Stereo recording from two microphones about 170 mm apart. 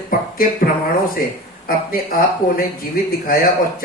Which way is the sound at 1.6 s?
55° left (ahead or behind).